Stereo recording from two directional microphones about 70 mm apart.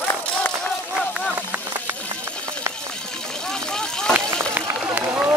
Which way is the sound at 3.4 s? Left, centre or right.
Centre.